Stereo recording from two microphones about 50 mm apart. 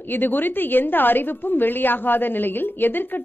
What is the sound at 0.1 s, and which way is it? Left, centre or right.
A woman's voice, left.